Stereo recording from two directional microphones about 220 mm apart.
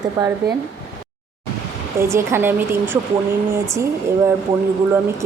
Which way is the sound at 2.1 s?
10° right (ahead or behind).